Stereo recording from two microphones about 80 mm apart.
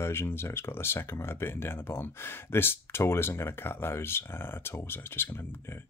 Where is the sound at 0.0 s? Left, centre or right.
Left.